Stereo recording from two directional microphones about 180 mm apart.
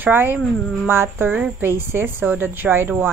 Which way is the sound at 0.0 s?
10° right (ahead or behind).